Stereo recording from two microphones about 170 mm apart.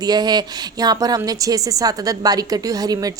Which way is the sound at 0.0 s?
25° right (ahead or behind).